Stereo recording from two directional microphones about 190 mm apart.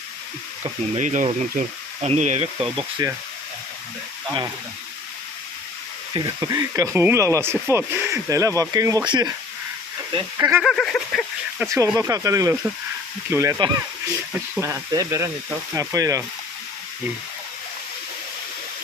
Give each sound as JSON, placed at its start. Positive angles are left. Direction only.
{"t": 0.6, "sound": "speech", "side_deg": -40}
{"t": 6.1, "sound": "speech", "side_deg": -20}
{"t": 10.3, "sound": "speech", "side_deg": -15}
{"t": 10.6, "sound": "speech", "side_deg": 0}
{"t": 11.6, "sound": "speech", "side_deg": -15}